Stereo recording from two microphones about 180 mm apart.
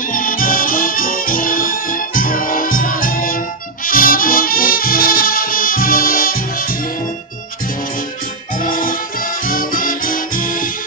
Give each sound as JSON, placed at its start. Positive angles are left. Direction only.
{"t": 0.1, "sound": "music", "side_deg": 50}
{"t": 8.5, "sound": "music", "side_deg": 50}